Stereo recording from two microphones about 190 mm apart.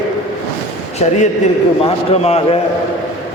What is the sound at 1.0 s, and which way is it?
A man's voice, 35° left (ahead or behind).